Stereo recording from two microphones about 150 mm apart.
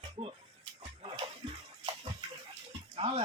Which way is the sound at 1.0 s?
35° right (ahead or behind).